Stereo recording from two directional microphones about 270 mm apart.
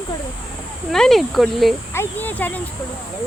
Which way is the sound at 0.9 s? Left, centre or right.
Centre.